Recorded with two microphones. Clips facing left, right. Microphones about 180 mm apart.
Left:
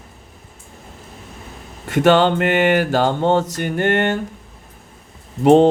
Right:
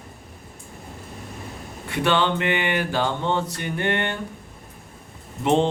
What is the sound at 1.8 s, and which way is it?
Speech, 45° left (ahead or behind).